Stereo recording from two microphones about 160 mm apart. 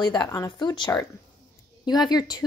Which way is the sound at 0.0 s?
25° left (ahead or behind).